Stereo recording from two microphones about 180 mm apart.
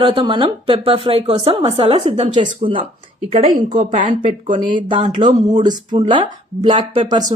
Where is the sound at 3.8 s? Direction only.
45° right (ahead or behind).